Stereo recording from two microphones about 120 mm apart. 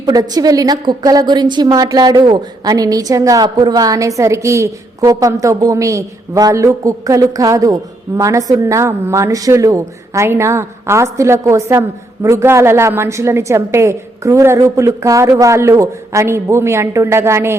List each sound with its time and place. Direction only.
0.0 s a woman's voice: 30° right (ahead or behind)